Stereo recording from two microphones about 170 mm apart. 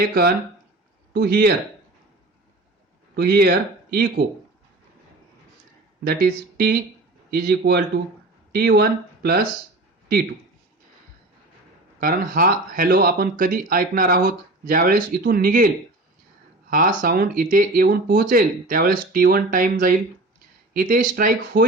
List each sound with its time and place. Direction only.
0.0 s speech: 65° right (ahead or behind)
3.2 s speech: 65° right (ahead or behind)
6.1 s speech: 60° right (ahead or behind)
11.9 s speech: 55° right (ahead or behind)